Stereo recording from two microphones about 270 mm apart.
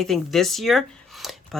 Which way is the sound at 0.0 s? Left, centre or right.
Centre.